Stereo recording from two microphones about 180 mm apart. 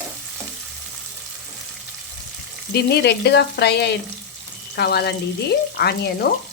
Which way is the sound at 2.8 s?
65° left (ahead or behind).